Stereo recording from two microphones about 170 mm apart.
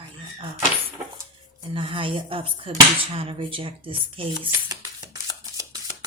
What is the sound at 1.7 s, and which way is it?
Speech, 30° right (ahead or behind).